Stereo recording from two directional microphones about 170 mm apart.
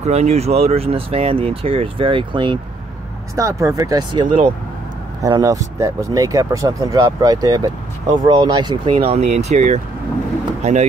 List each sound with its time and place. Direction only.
0.0 s speech: 40° right (ahead or behind)
3.3 s speech: 20° right (ahead or behind)
8.9 s speech: 40° right (ahead or behind)